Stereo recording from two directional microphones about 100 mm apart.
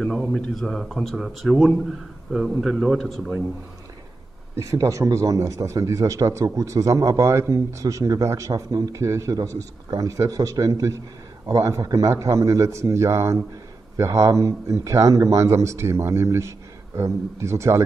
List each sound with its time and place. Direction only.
0.0 s speech: 5° left (ahead or behind)
4.6 s a man's voice: 35° right (ahead or behind)